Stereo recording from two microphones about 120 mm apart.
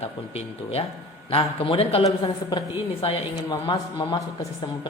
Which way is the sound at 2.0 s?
35° left (ahead or behind).